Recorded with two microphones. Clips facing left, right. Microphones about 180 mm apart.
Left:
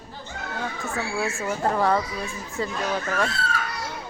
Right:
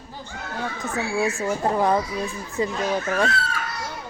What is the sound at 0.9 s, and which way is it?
Speech, 20° right (ahead or behind).